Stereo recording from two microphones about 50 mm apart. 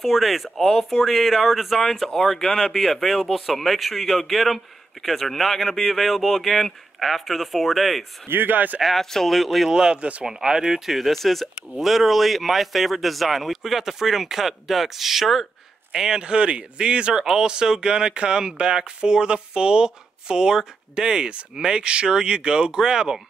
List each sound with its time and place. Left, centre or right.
0.0 s speech: centre
8.3 s speech: right
8.8 s speech: centre
10.2 s a man's voice: centre
16.2 s speech: right